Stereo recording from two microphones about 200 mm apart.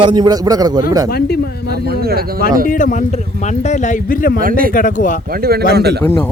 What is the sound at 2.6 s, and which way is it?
Speech, 40° left (ahead or behind).